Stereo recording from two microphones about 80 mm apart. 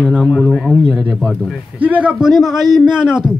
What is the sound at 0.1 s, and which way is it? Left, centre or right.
Speech, centre.